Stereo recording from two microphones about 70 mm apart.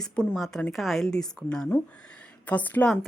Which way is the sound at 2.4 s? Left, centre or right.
Left.